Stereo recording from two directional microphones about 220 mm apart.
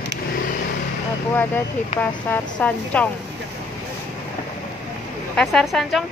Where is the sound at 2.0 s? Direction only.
10° left (ahead or behind).